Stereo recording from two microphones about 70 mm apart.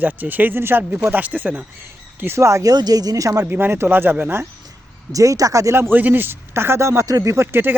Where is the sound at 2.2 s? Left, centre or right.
Right.